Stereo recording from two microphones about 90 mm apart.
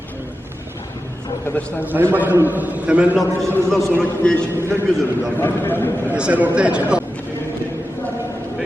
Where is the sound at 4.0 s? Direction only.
10° left (ahead or behind).